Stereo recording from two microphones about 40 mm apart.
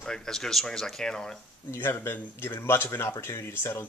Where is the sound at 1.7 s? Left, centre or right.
Left.